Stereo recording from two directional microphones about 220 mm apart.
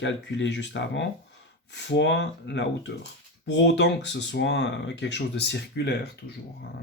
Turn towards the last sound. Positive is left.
turn(degrees=50)  # may be behind; listen again after turning